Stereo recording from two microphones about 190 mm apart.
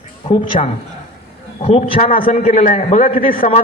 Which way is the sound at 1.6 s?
40° left (ahead or behind).